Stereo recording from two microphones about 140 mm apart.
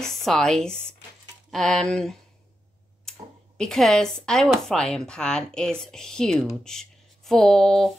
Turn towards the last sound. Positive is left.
turn(degrees=0)  # may be behind; listen again after turning